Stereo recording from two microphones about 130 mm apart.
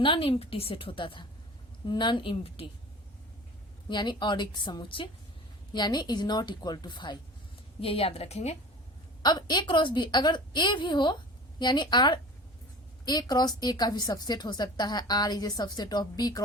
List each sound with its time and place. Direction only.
0.0 s a woman's voice: 45° left (ahead or behind)
3.8 s a woman's voice: 35° left (ahead or behind)
7.8 s a woman's voice: 45° left (ahead or behind)
9.2 s a woman's voice: 35° left (ahead or behind)